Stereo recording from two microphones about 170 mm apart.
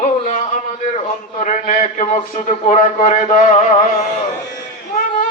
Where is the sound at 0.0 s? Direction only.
45° left (ahead or behind).